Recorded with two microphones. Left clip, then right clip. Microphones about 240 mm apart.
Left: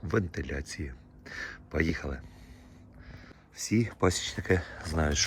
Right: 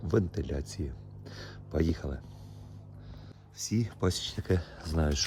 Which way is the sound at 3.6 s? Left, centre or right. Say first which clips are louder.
Left 5 dB; centre.